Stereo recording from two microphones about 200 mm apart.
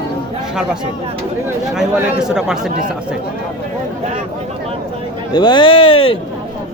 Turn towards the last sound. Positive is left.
turn(degrees=25)  # may be behind; listen again after turning